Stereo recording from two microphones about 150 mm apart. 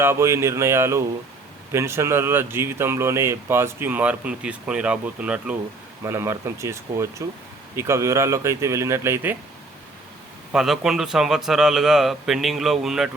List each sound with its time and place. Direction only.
0.0 s speech: 15° right (ahead or behind)
10.5 s a man's voice: 5° right (ahead or behind)